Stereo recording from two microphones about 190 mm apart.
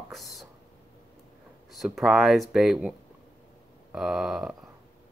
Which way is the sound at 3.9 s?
Centre (ahead or behind).